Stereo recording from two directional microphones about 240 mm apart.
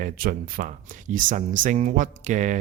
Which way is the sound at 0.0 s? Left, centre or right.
Right.